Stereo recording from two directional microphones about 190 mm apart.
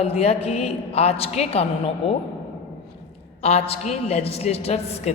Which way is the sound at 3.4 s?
35° left (ahead or behind).